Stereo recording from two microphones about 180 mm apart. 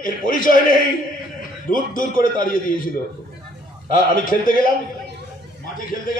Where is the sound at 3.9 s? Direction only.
50° left (ahead or behind).